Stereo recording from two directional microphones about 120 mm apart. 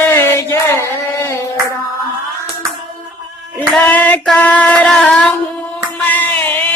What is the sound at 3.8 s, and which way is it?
Female singing, 10° left (ahead or behind).